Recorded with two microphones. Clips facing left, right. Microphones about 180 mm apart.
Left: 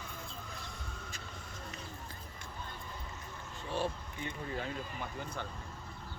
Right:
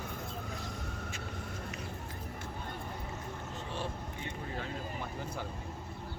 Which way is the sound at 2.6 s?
60° right (ahead or behind).